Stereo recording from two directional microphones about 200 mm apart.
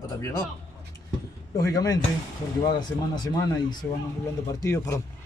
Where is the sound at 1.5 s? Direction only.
20° left (ahead or behind).